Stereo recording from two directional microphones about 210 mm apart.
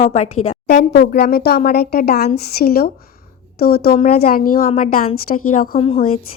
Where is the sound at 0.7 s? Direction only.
50° left (ahead or behind).